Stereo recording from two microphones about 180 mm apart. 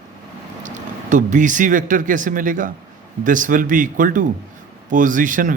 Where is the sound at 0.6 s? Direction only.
45° right (ahead or behind).